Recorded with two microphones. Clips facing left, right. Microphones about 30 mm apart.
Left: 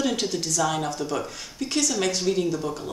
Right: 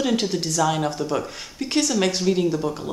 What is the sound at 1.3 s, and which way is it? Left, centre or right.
Speech, right.